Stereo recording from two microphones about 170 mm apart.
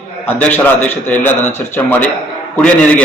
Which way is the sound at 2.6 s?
5° left (ahead or behind).